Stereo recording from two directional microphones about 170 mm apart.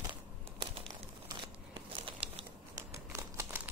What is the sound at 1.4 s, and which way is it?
Crumpling, 30° right (ahead or behind).